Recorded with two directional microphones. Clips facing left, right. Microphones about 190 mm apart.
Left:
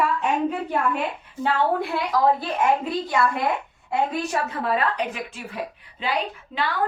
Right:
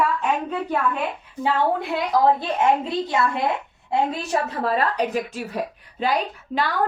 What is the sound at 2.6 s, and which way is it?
A woman's voice, 25° right (ahead or behind).